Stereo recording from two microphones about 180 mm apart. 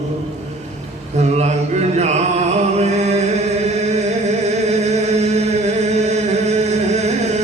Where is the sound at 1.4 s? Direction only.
40° right (ahead or behind).